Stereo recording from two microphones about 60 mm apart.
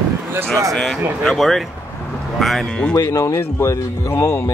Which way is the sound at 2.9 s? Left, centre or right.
Left.